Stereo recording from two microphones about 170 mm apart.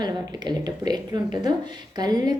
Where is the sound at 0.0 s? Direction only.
25° right (ahead or behind).